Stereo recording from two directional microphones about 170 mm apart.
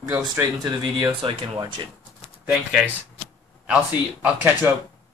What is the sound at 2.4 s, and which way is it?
Speech, 5° right (ahead or behind).